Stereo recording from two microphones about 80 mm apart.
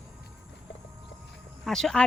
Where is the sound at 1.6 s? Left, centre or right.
Centre.